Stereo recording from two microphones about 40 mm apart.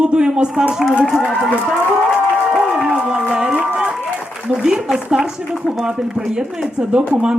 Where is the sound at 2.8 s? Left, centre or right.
Right.